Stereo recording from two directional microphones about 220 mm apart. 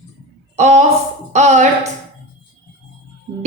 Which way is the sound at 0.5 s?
30° right (ahead or behind).